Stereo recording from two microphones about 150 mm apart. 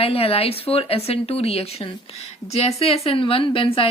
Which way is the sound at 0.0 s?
40° left (ahead or behind).